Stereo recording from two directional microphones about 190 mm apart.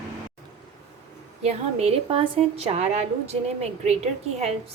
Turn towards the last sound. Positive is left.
turn(degrees=-35)  # may be behind; listen again after turning